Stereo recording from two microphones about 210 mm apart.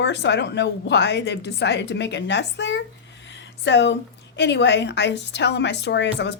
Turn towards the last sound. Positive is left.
turn(degrees=55)  # may be behind; listen again after turning